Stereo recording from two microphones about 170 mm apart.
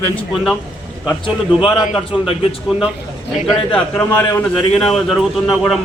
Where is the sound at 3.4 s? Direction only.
Centre (ahead or behind).